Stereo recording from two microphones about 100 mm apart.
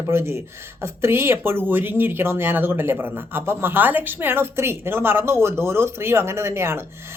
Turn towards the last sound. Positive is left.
turn(degrees=-25)  # may be behind; listen again after turning